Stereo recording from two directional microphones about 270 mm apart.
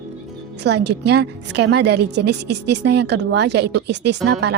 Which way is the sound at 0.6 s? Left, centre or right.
Right.